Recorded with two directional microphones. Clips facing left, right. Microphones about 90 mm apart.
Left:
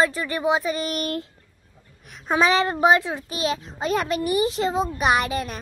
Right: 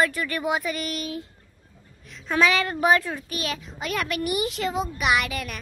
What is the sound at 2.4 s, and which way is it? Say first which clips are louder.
A child's voice: left 3 dB; 30° left (ahead or behind).